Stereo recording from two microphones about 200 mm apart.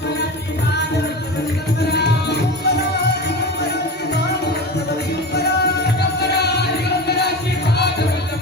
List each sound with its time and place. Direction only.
1.9 s music: 55° left (ahead or behind)
5.3 s music: 55° left (ahead or behind)